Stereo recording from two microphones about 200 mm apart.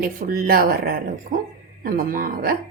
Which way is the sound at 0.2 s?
45° right (ahead or behind).